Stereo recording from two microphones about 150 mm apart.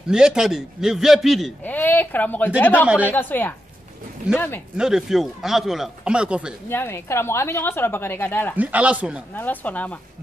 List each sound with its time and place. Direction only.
0.1 s speech: 5° right (ahead or behind)
1.6 s a woman's voice: 10° left (ahead or behind)
4.7 s speech: 5° right (ahead or behind)
6.7 s a woman's voice: 15° left (ahead or behind)
8.5 s speech: 10° right (ahead or behind)
9.3 s a woman's voice: 10° left (ahead or behind)